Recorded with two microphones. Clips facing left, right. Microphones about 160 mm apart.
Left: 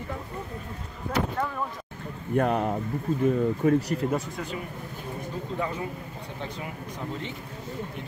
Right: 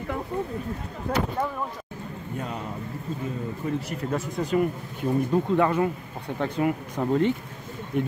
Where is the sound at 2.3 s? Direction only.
65° left (ahead or behind).